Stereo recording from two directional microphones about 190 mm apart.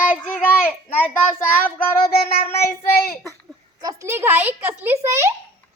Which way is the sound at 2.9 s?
55° left (ahead or behind).